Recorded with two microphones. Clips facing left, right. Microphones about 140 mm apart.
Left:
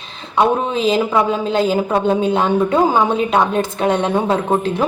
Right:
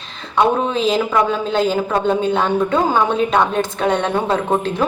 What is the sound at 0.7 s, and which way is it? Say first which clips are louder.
A woman's voice: left 1 dB; 5° left (ahead or behind).